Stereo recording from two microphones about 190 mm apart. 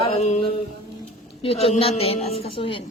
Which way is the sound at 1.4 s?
30° left (ahead or behind).